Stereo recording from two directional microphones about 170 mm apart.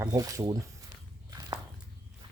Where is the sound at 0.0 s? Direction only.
20° right (ahead or behind).